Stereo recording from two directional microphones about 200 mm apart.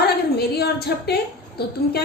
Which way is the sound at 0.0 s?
50° left (ahead or behind).